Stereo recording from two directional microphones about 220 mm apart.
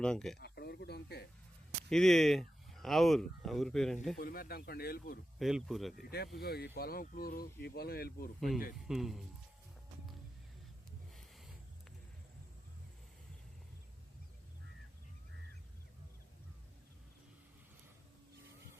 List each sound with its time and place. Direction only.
0.0 s speech: 5° left (ahead or behind)
0.3 s a sound: 45° left (ahead or behind)
1.9 s speech: centre (ahead or behind)
4.2 s speech: 40° left (ahead or behind)
5.4 s speech: centre (ahead or behind)
6.0 s speech: 45° left (ahead or behind)
8.4 s speech: centre (ahead or behind)